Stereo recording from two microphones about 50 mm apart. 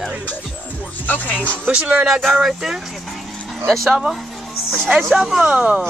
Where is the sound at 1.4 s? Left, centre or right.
Left.